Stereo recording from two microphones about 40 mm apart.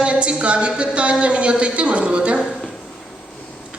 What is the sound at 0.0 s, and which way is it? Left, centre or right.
A woman's voice, right.